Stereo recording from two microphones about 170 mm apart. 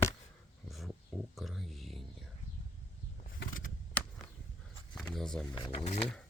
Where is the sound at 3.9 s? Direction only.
10° left (ahead or behind).